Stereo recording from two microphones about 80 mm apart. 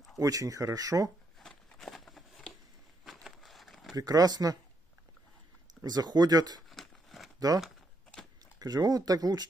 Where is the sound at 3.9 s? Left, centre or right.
Right.